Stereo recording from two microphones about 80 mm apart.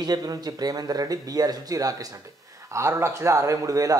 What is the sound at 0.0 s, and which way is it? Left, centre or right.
A man's voice, right.